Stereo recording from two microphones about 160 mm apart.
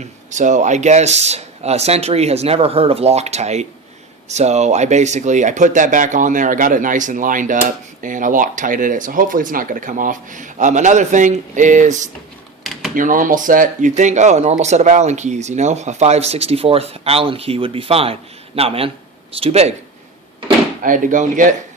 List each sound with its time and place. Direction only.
0.0 s speech: 50° right (ahead or behind)
20.8 s speech: 55° right (ahead or behind)